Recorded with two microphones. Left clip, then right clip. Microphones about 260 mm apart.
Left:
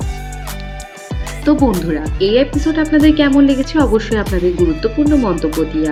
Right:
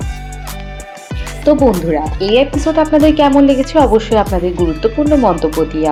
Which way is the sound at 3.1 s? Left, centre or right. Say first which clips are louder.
Right 2 dB; centre.